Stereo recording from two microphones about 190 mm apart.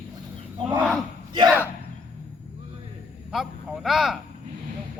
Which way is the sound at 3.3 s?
Centre (ahead or behind).